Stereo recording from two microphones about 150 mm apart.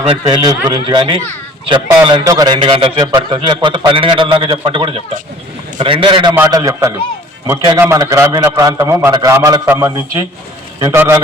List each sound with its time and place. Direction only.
0.1 s a man's voice: 30° right (ahead or behind)
6.3 s a man's voice: 20° right (ahead or behind)